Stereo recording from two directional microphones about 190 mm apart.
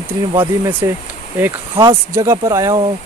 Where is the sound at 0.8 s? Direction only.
15° right (ahead or behind).